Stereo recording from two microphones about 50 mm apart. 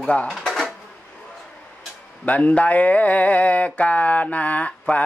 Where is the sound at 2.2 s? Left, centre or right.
Left.